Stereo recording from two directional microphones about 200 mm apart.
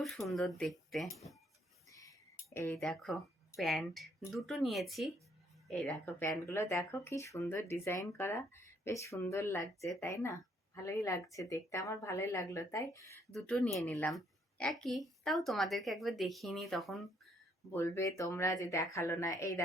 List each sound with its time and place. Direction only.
0.0 s speech: centre (ahead or behind)
1.9 s music: 15° left (ahead or behind)
2.8 s speech: centre (ahead or behind)
13.3 s speech: 5° left (ahead or behind)
17.7 s speech: 10° left (ahead or behind)